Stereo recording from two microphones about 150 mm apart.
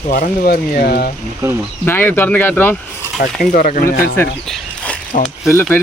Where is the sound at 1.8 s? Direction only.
15° left (ahead or behind).